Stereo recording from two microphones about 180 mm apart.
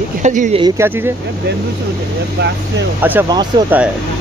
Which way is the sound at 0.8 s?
15° right (ahead or behind).